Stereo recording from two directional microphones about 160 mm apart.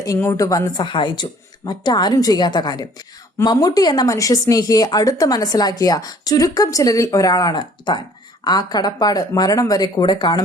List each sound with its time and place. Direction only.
0.0 s speech: 15° left (ahead or behind)